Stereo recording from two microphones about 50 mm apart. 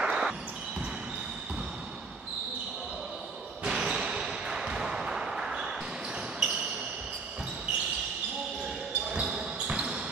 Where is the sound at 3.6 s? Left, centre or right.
Centre.